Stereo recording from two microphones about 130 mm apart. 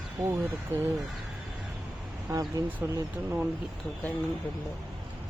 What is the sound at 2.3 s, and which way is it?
Speech, 25° right (ahead or behind).